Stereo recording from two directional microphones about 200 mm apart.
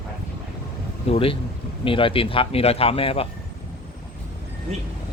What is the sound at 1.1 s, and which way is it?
Speech, 25° left (ahead or behind).